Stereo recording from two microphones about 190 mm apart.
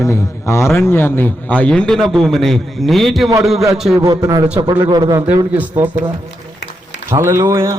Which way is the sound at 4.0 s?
20° right (ahead or behind).